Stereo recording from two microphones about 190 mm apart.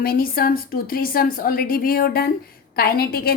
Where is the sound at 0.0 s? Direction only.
50° left (ahead or behind).